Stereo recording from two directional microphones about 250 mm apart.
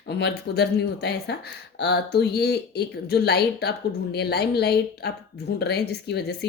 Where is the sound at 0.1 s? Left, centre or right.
Left.